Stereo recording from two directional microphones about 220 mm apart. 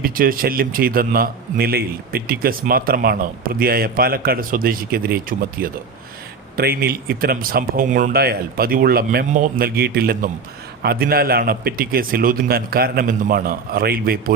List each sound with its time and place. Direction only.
0.0 s a man's voice: 40° right (ahead or behind)